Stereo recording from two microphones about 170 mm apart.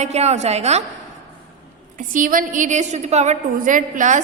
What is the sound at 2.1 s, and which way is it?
A woman's voice, 55° right (ahead or behind).